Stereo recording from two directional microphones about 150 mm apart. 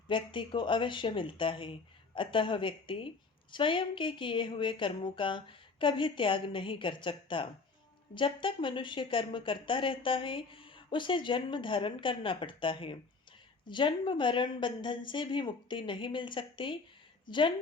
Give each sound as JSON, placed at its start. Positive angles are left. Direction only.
{"t": 0.1, "sound": "a woman's voice", "side_deg": 35}